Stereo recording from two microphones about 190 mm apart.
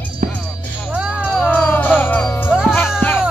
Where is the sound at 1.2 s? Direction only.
5° left (ahead or behind).